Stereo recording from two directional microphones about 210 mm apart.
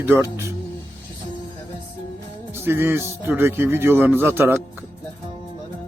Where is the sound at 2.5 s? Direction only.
10° right (ahead or behind).